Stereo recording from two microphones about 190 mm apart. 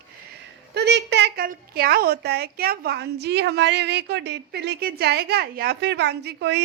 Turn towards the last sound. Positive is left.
turn(degrees=-65)  # may be behind; listen again after turning